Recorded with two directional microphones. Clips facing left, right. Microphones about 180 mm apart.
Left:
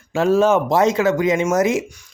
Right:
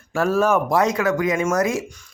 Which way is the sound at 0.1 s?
20° left (ahead or behind).